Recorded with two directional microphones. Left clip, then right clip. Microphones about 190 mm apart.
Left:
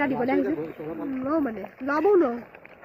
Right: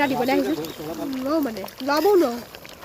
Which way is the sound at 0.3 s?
60° right (ahead or behind).